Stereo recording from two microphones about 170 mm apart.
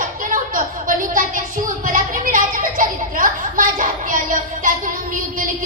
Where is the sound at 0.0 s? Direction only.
50° right (ahead or behind).